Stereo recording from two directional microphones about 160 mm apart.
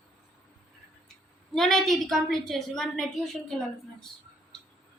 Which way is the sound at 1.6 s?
Centre (ahead or behind).